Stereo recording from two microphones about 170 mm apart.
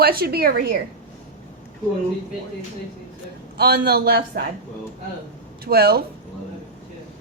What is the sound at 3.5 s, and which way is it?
Speech, 65° right (ahead or behind).